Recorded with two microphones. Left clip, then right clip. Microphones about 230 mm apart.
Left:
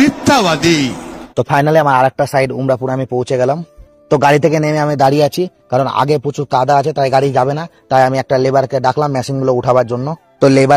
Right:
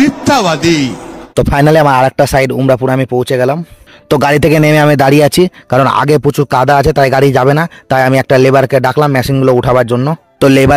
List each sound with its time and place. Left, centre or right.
0.0 s speech: centre
1.3 s speech: right
4.1 s speech: right